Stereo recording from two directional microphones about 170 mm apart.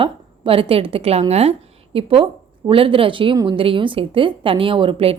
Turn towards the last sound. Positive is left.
turn(degrees=-30)  # may be behind; listen again after turning